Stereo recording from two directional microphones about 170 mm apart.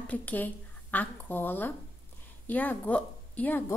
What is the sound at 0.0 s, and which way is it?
A woman's voice, 10° left (ahead or behind).